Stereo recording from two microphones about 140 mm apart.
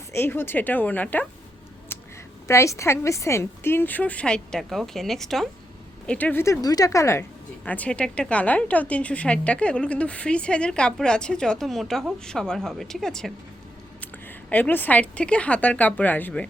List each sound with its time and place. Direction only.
0.1 s speech: 15° left (ahead or behind)
1.9 s a sound: 15° left (ahead or behind)
2.5 s speech: 20° left (ahead or behind)